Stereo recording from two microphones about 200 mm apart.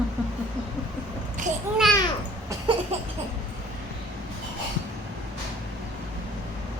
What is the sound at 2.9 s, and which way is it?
Laughter, 30° right (ahead or behind).